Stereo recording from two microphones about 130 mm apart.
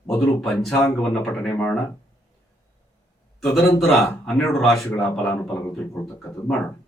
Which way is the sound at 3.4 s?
Centre (ahead or behind).